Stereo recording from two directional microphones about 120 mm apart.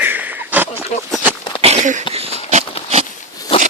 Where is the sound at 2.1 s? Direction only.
55° right (ahead or behind).